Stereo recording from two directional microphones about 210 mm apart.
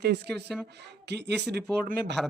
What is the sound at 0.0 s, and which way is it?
Speech, 50° right (ahead or behind).